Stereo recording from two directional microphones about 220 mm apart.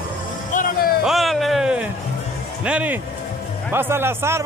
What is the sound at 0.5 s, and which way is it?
Music, 40° left (ahead or behind).